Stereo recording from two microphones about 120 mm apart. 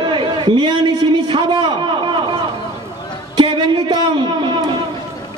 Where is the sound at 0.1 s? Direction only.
40° right (ahead or behind).